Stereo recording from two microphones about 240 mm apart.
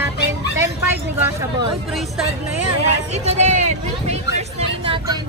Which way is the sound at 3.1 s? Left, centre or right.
Right.